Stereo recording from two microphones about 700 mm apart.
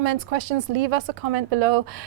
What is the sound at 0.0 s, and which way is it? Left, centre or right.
A woman's voice, right.